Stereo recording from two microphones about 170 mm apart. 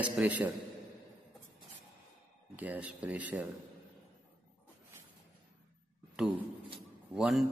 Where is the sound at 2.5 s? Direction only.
10° right (ahead or behind).